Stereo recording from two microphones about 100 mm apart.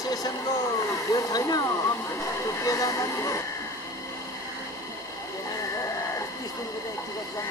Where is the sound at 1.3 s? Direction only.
40° left (ahead or behind).